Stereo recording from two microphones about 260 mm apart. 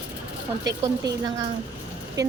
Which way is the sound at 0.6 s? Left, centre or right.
Centre.